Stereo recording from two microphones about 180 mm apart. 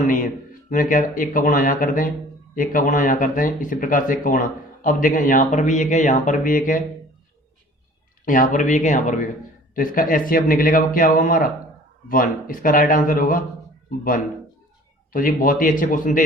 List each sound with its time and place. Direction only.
0.0 s speech: 45° left (ahead or behind)
8.2 s speech: 45° left (ahead or behind)
15.1 s speech: 50° left (ahead or behind)